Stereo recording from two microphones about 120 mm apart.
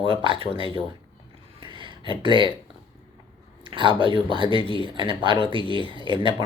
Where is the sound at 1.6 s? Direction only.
45° right (ahead or behind).